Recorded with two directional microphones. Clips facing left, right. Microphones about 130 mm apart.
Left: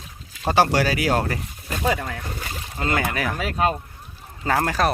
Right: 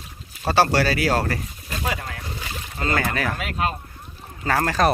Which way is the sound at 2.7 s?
20° left (ahead or behind).